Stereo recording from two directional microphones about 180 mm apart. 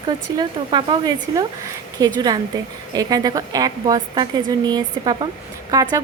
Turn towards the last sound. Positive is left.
turn(degrees=-20)  # may be behind; listen again after turning